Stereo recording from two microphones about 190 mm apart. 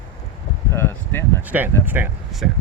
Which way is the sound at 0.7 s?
10° left (ahead or behind).